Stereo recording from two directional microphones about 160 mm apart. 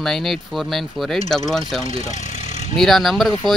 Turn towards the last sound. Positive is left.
turn(degrees=0)  # may be behind; listen again after turning